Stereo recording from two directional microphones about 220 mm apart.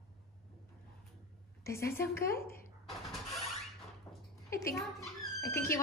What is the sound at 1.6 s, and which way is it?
Speech, 10° left (ahead or behind).